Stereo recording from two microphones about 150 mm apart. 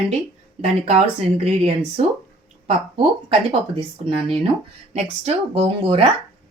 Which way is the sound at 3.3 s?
35° right (ahead or behind).